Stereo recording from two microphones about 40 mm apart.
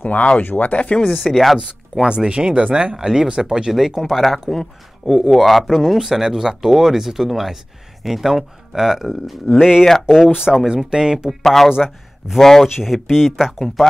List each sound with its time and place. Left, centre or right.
0.0 s speech: left
1.1 s speech: centre
2.0 s speech: right
3.7 s speech: centre
9.6 s speech: centre
11.4 s speech: centre
12.6 s speech: centre